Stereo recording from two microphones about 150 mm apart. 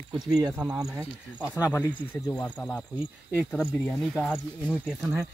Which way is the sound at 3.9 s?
Centre (ahead or behind).